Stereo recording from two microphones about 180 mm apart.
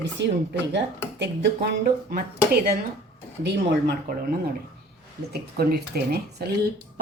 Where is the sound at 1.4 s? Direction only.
65° right (ahead or behind).